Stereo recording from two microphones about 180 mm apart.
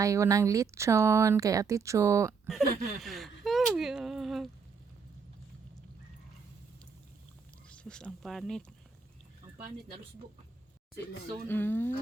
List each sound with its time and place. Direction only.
0.0 s speech: 15° right (ahead or behind)
2.5 s a sound: centre (ahead or behind)
7.7 s speech: 5° left (ahead or behind)
11.4 s speech: 10° left (ahead or behind)